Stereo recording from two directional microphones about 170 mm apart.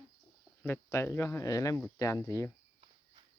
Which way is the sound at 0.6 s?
15° left (ahead or behind).